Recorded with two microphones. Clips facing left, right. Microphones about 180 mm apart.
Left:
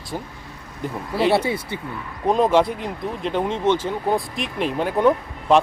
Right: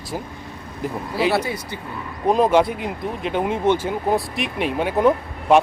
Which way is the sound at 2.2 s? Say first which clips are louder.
Right 1 dB; centre (ahead or behind).